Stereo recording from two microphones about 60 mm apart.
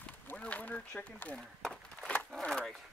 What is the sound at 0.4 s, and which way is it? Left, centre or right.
Speech, left.